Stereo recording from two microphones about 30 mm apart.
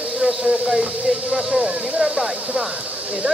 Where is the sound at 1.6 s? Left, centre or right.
Centre.